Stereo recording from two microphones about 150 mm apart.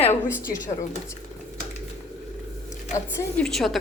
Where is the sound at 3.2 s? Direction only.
5° left (ahead or behind).